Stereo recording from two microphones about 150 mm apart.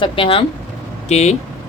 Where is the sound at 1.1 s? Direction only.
45° left (ahead or behind).